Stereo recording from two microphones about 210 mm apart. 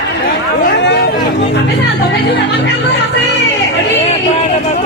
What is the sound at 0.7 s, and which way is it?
Chatter, 55° left (ahead or behind).